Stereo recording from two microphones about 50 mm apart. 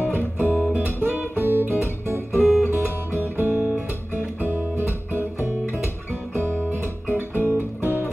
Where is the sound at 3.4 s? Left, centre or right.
Right.